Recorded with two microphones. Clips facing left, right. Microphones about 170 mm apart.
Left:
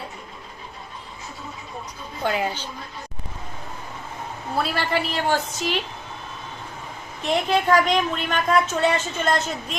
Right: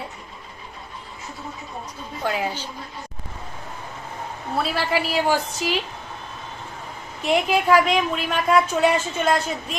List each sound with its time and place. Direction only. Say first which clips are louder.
2.2 s a woman's voice: left 1 dB; centre (ahead or behind)
4.5 s a woman's voice: right 1 dB; centre (ahead or behind)
7.2 s a woman's voice: right 1 dB; 5° right (ahead or behind)